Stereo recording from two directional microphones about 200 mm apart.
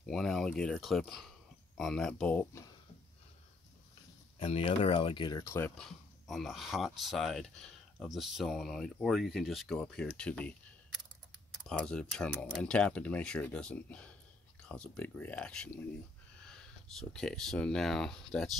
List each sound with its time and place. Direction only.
0.0 s speech: centre (ahead or behind)
4.4 s speech: 30° left (ahead or behind)
5.8 s speech: centre (ahead or behind)
17.1 s speech: 5° left (ahead or behind)